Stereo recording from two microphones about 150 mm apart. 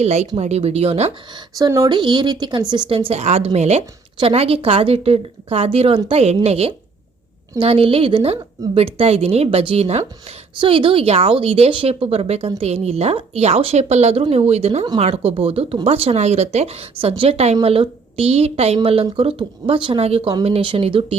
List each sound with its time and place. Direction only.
0.0 s speech: 45° right (ahead or behind)
1.3 s speech: 25° right (ahead or behind)
1.9 s speech: 30° right (ahead or behind)